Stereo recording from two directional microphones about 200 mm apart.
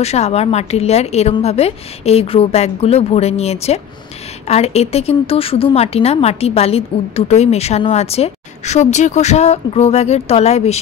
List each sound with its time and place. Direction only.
0.0 s a woman's voice: 30° left (ahead or behind)